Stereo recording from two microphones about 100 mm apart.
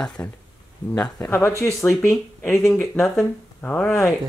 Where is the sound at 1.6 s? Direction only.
30° left (ahead or behind).